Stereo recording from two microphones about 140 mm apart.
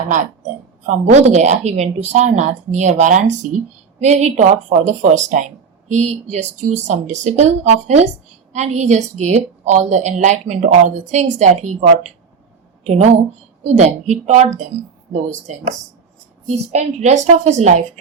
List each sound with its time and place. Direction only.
0.9 s a woman's voice: 50° right (ahead or behind)
16.7 s a woman's voice: 55° right (ahead or behind)